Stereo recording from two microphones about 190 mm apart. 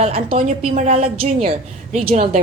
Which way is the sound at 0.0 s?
30° right (ahead or behind).